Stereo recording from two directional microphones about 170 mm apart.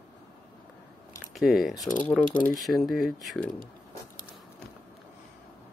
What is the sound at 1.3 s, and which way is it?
Speech, centre (ahead or behind).